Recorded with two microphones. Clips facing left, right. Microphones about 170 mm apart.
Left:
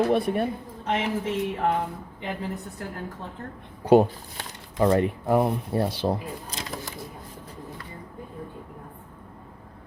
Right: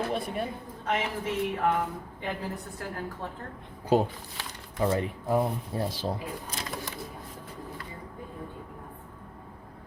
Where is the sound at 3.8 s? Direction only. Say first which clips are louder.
Left 7 dB; 70° left (ahead or behind).